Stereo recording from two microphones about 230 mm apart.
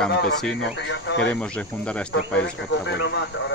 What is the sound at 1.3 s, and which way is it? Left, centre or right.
Speech, centre.